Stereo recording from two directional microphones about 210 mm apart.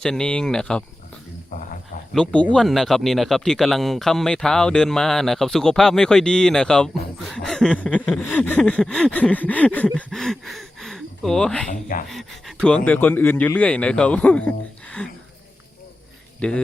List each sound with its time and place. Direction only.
0.0 s speech: 5° left (ahead or behind)
1.5 s speech: 40° left (ahead or behind)
2.1 s speech: 5° left (ahead or behind)
11.7 s speech: 40° left (ahead or behind)
12.0 s speech: centre (ahead or behind)
16.4 s speech: 5° left (ahead or behind)